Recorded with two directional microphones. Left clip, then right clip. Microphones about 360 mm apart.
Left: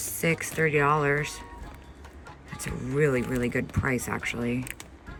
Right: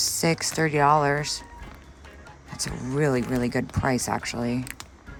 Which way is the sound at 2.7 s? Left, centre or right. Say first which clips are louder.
Even; centre.